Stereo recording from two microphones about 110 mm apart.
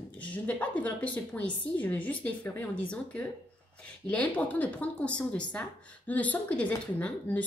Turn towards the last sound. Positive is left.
turn(degrees=10)  # may be behind; listen again after turning